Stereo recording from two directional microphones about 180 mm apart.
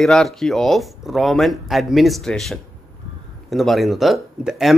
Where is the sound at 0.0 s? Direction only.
Centre (ahead or behind).